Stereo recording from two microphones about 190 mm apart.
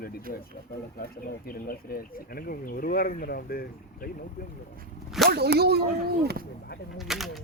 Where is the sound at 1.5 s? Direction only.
50° left (ahead or behind).